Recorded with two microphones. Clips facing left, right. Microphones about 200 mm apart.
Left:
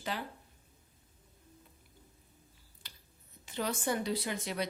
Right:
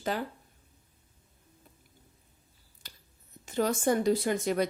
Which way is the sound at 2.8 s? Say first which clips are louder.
Right 4 dB; 45° right (ahead or behind).